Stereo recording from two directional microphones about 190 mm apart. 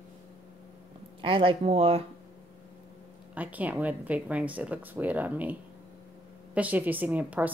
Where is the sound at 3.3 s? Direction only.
10° right (ahead or behind).